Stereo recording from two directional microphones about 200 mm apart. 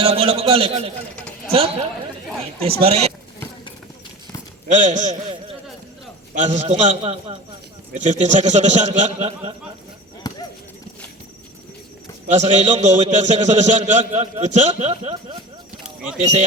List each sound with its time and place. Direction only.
0.0 s a man's voice: 30° right (ahead or behind)
2.8 s a man's voice: 30° right (ahead or behind)
4.7 s a man's voice: 35° right (ahead or behind)
6.3 s a man's voice: 35° right (ahead or behind)
10.3 s horse: 20° left (ahead or behind)
12.3 s a man's voice: 35° right (ahead or behind)